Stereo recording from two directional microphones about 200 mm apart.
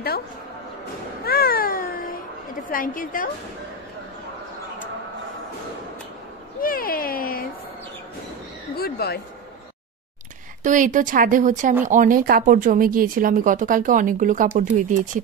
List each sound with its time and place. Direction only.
1.2 s cat: 50° left (ahead or behind)
2.7 s a woman's voice: 45° left (ahead or behind)
6.6 s a sound: 45° left (ahead or behind)
8.7 s a woman's voice: 50° left (ahead or behind)
10.6 s speech: 40° right (ahead or behind)